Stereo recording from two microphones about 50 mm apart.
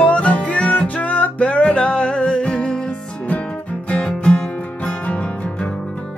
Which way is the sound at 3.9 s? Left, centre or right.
Left.